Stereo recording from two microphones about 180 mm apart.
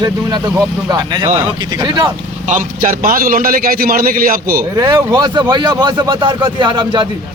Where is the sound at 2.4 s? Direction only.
45° right (ahead or behind).